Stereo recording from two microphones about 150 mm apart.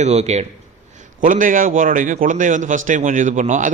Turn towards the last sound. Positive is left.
turn(degrees=-55)  # may be behind; listen again after turning